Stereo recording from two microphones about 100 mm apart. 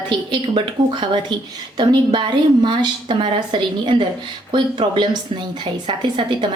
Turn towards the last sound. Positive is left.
turn(degrees=-50)  # may be behind; listen again after turning